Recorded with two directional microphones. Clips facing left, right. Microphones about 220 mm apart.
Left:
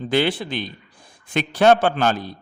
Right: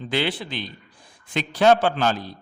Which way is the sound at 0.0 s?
45° left (ahead or behind).